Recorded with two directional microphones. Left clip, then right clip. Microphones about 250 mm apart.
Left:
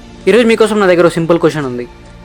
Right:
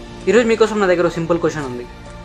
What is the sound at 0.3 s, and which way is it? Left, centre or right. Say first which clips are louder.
A man's voice: left 5 dB; left.